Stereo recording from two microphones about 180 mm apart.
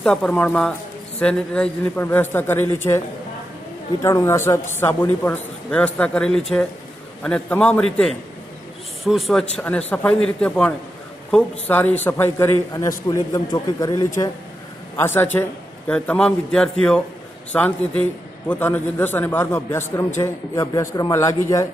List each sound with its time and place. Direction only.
0.0 s a man's voice: 5° left (ahead or behind)
4.0 s a man's voice: 15° left (ahead or behind)